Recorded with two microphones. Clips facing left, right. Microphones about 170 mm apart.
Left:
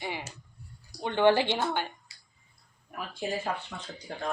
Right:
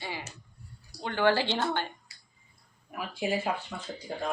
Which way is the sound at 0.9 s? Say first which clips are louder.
Left 3 dB; 20° left (ahead or behind).